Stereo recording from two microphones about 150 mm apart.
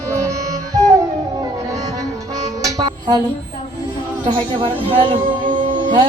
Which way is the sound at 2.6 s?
25° right (ahead or behind).